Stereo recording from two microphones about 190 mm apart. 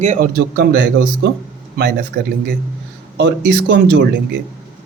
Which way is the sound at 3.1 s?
65° right (ahead or behind).